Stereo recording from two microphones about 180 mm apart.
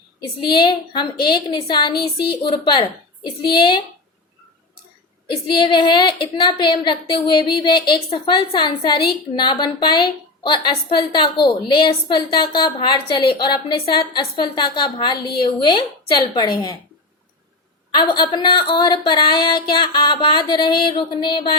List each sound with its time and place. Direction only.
0.2 s a woman's voice: 25° left (ahead or behind)
5.5 s a woman's voice: 25° left (ahead or behind)
17.9 s a woman's voice: 25° left (ahead or behind)